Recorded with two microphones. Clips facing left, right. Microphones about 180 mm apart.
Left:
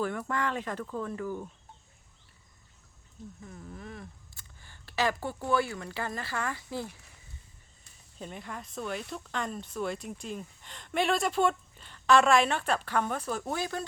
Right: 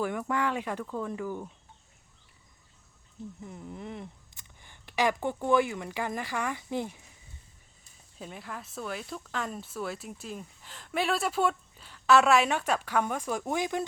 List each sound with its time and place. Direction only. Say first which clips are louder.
0.0 s speech: right 2 dB; 10° right (ahead or behind)
3.4 s speech: right 3 dB; 20° right (ahead or behind)
8.2 s speech: even; 5° right (ahead or behind)